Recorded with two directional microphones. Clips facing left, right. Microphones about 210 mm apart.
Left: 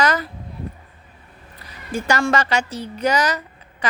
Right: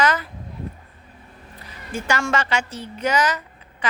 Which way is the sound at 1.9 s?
40° left (ahead or behind).